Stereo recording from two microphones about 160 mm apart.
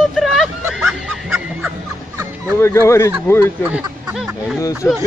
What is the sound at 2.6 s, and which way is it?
Speech, 20° left (ahead or behind).